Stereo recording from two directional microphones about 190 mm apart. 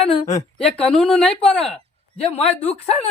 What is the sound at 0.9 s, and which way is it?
Speech, 5° left (ahead or behind).